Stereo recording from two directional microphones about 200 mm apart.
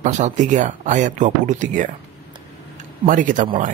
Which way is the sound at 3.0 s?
40° right (ahead or behind).